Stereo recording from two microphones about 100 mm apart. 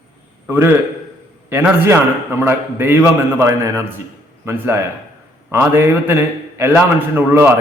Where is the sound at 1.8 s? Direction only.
25° right (ahead or behind).